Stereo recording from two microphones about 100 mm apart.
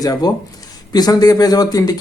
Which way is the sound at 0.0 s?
40° left (ahead or behind).